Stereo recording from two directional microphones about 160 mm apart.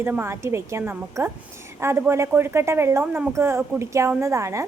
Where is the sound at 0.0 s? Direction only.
15° right (ahead or behind).